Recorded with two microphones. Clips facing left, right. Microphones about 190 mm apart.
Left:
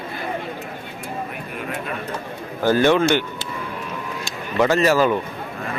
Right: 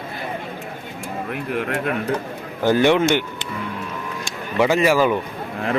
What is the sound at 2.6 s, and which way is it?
Speech, 15° right (ahead or behind).